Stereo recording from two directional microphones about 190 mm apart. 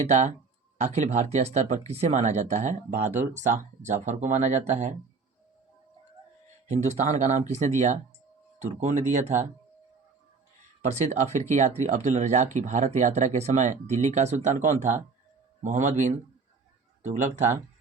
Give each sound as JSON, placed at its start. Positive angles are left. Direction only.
{"t": 0.1, "sound": "speech", "side_deg": -40}
{"t": 6.7, "sound": "speech", "side_deg": -35}
{"t": 10.8, "sound": "speech", "side_deg": -35}
{"t": 17.2, "sound": "speech", "side_deg": -40}